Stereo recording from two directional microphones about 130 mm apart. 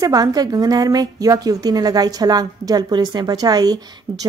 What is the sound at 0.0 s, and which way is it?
Speech, 30° right (ahead or behind).